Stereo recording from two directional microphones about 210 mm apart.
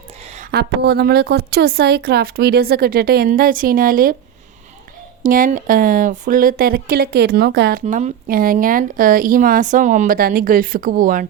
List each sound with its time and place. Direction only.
0.5 s speech: 50° right (ahead or behind)
5.2 s speech: 40° right (ahead or behind)